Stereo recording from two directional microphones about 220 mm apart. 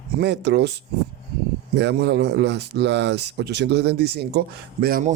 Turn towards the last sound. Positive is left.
turn(degrees=-40)  # may be behind; listen again after turning